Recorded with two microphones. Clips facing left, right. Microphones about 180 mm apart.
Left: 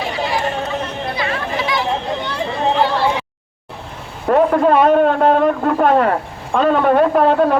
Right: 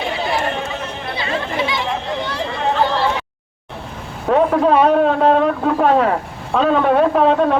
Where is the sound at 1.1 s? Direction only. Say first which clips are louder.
Right 2 dB; 25° right (ahead or behind).